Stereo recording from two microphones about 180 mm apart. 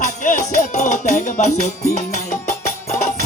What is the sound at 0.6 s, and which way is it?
Music, 40° left (ahead or behind).